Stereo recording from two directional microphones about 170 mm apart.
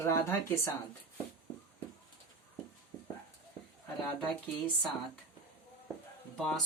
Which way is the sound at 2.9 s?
5° left (ahead or behind).